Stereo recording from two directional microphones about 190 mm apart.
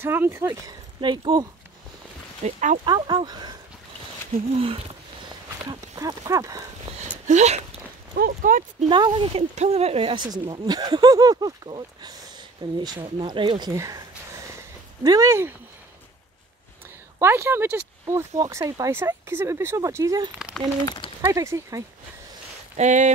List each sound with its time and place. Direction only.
0.0 s speech: 10° right (ahead or behind)
2.4 s speech: 40° right (ahead or behind)
2.8 s speech: 25° right (ahead or behind)
5.7 s speech: 20° right (ahead or behind)
6.9 s a sound: 35° right (ahead or behind)
8.1 s speech: 50° right (ahead or behind)
8.8 s speech: 25° right (ahead or behind)
17.2 s speech: 10° right (ahead or behind)
20.3 s speech: centre (ahead or behind)
21.2 s speech: 15° right (ahead or behind)
22.8 s speech: 40° right (ahead or behind)